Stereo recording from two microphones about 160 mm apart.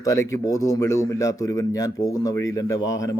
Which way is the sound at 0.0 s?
20° left (ahead or behind).